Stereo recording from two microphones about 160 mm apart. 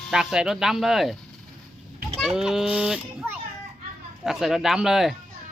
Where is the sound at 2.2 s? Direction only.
5° right (ahead or behind).